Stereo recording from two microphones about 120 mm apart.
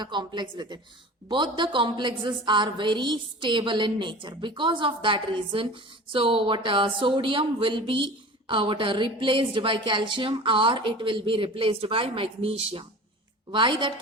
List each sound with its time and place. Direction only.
0.0 s a woman's voice: 40° right (ahead or behind)